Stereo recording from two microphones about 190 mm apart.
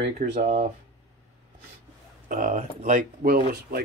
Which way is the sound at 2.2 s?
45° right (ahead or behind).